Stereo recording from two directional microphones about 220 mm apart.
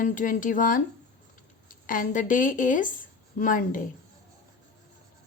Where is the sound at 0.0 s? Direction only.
35° left (ahead or behind).